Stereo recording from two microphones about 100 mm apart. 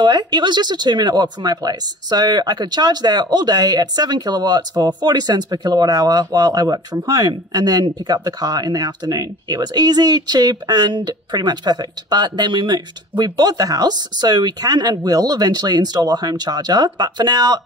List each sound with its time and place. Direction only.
0.0 s speech: 45° right (ahead or behind)